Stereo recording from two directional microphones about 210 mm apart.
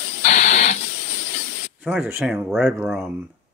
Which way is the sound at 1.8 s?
10° right (ahead or behind).